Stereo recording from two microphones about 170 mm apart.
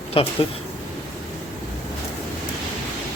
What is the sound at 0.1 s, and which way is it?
Speech, 35° left (ahead or behind).